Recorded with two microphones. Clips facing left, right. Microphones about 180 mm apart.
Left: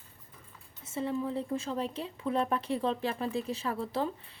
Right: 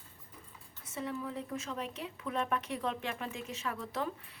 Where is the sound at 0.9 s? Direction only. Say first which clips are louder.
Left 6 dB; 30° left (ahead or behind).